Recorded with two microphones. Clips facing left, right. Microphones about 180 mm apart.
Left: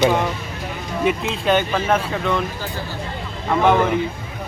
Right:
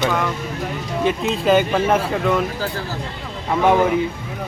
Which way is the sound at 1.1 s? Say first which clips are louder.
Right 2 dB; centre (ahead or behind).